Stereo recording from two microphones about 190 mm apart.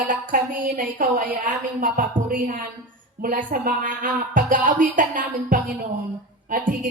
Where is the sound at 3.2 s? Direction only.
45° right (ahead or behind).